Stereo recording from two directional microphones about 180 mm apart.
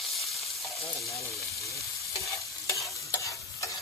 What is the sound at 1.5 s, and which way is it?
Stir, 15° left (ahead or behind).